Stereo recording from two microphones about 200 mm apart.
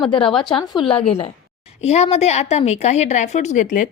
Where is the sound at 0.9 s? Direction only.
25° left (ahead or behind).